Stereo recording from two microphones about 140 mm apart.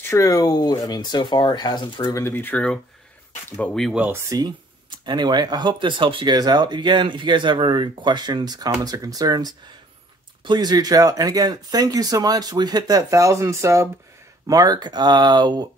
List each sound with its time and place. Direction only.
0.1 s speech: 25° left (ahead or behind)
2.2 s speech: 15° left (ahead or behind)
3.9 s speech: 10° right (ahead or behind)
4.3 s speech: 30° right (ahead or behind)